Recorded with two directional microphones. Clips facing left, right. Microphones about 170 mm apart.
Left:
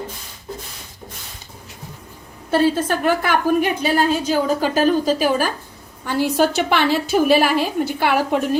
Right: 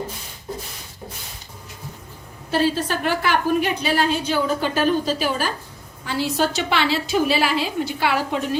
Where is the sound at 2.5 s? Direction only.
50° left (ahead or behind).